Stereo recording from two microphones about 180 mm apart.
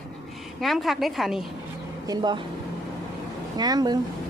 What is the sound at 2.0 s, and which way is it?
Speech, 20° right (ahead or behind).